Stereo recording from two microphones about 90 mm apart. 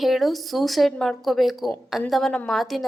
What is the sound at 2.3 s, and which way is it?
Speech, 10° left (ahead or behind).